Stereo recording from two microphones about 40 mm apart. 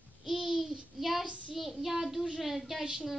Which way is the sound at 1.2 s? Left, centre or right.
Right.